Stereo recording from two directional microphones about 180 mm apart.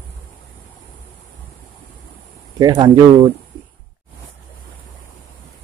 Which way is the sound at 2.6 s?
25° right (ahead or behind).